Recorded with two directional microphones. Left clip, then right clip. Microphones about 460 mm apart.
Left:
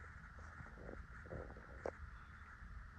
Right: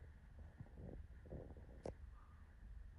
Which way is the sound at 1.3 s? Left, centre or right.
Centre.